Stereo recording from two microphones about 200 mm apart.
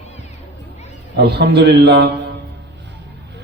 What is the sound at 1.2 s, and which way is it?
Speech, 55° right (ahead or behind).